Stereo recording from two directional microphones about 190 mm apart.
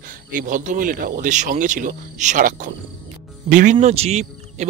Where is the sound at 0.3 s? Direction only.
45° right (ahead or behind).